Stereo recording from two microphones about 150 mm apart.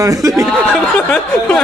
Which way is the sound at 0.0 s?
20° right (ahead or behind).